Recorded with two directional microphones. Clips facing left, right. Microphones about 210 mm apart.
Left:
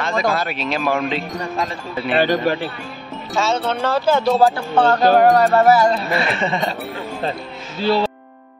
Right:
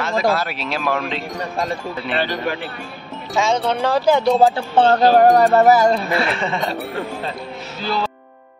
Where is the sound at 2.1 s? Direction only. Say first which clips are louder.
Left 6 dB; 45° left (ahead or behind).